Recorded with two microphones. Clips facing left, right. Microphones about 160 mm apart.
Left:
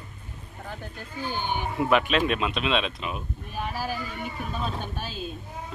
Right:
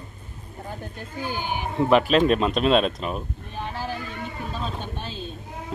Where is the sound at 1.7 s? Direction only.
35° right (ahead or behind).